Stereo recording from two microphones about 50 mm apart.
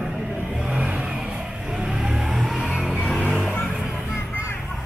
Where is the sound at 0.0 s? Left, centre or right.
Right; by 2.7 s centre.